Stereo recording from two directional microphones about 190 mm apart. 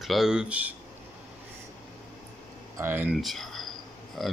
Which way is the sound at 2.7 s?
10° right (ahead or behind).